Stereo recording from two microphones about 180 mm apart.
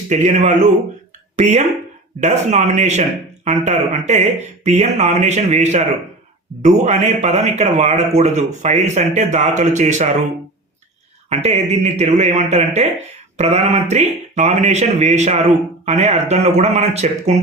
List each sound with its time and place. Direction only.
0.1 s speech: 40° right (ahead or behind)
11.3 s speech: 35° right (ahead or behind)